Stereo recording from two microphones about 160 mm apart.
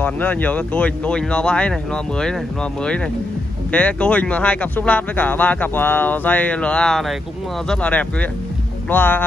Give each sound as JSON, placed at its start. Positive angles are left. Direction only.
{"t": 0.0, "sound": "speech", "side_deg": 10}
{"t": 3.7, "sound": "speech", "side_deg": 10}